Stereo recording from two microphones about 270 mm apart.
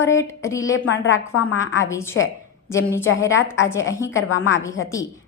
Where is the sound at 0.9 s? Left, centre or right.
Left.